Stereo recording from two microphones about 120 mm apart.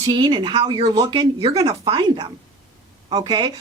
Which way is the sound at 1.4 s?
50° right (ahead or behind).